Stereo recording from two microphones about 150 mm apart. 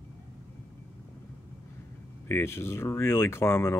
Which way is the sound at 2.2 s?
15° left (ahead or behind).